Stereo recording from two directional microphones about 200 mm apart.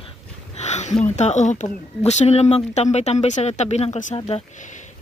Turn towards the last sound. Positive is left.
turn(degrees=30)  # may be behind; listen again after turning